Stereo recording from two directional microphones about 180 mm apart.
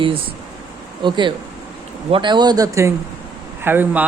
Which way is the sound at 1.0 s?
25° right (ahead or behind).